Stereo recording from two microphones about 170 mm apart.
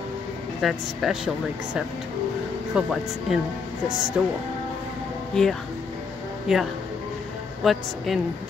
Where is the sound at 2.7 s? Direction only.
5° right (ahead or behind).